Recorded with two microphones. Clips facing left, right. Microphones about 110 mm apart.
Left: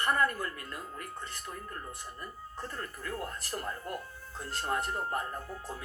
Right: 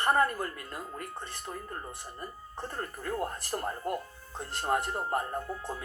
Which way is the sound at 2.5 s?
45° right (ahead or behind).